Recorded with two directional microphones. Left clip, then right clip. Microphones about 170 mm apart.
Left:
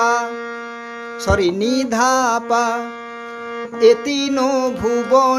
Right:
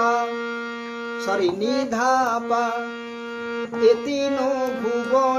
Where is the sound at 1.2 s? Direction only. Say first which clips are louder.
Left 5 dB; 50° left (ahead or behind).